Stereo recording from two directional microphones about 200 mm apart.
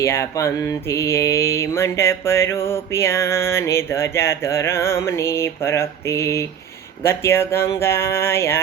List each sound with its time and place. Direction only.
0.0 s mantra: 15° left (ahead or behind)